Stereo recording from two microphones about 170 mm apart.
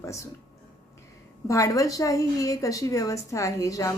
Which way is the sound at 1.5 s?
20° left (ahead or behind).